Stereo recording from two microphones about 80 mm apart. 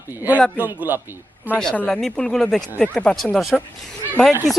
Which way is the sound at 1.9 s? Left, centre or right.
Centre.